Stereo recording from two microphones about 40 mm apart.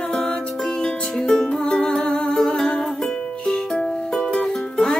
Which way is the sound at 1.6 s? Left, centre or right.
Left.